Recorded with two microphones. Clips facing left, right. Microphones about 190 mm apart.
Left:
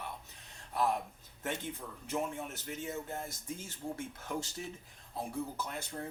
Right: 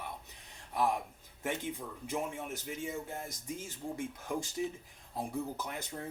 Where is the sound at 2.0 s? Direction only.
10° right (ahead or behind).